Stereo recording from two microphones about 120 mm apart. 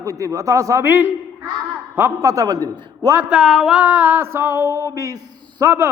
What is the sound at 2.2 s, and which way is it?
Speech, 30° right (ahead or behind).